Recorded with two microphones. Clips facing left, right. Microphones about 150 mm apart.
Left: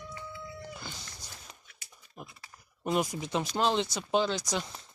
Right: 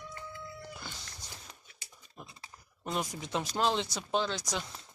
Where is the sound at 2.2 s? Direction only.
25° right (ahead or behind).